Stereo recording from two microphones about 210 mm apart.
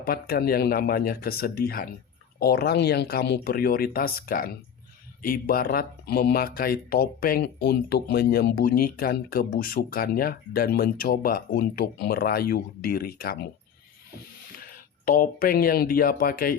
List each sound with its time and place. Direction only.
0.0 s speech: 45° left (ahead or behind)
14.5 s speech: 45° left (ahead or behind)